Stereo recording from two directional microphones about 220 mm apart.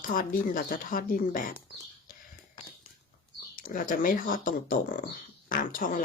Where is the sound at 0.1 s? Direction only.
40° left (ahead or behind).